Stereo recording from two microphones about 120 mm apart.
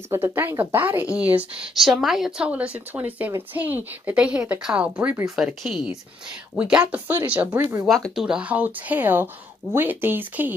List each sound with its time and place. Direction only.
0.1 s a woman's voice: 20° right (ahead or behind)
1.8 s a woman's voice: centre (ahead or behind)
5.2 s a woman's voice: 5° right (ahead or behind)